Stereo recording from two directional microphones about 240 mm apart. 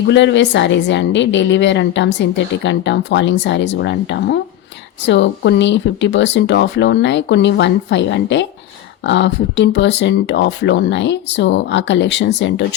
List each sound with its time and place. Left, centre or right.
0.1 s a woman's voice: left